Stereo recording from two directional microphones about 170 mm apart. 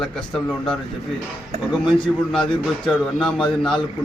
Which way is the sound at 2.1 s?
10° left (ahead or behind).